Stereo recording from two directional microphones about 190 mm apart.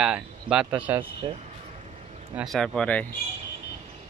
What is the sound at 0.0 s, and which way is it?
Speech, 5° right (ahead or behind).